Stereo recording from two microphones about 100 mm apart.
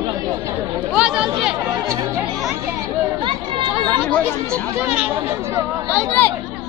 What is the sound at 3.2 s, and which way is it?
Chatter, 55° right (ahead or behind).